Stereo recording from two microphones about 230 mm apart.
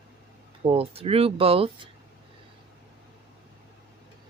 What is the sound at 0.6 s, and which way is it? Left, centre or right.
Speech, right.